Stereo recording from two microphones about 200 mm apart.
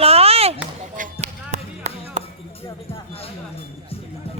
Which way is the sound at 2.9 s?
30° left (ahead or behind).